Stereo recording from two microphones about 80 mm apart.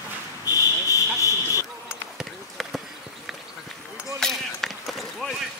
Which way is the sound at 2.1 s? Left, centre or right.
Centre.